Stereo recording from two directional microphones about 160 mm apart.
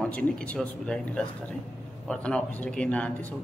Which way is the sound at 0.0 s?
5° left (ahead or behind).